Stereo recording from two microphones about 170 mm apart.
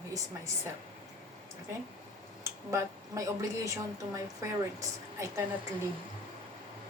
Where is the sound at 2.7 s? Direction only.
20° right (ahead or behind).